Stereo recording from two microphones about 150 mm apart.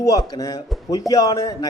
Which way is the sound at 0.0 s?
20° left (ahead or behind).